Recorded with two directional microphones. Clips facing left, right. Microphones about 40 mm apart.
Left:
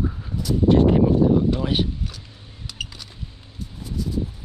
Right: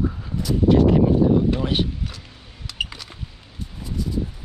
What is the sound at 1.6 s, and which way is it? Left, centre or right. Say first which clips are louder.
Speech: even; centre.